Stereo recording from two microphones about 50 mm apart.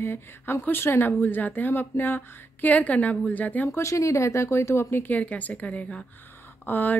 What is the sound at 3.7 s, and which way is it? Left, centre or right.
Speech, left.